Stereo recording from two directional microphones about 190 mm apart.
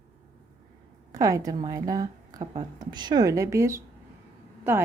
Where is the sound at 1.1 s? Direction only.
20° right (ahead or behind).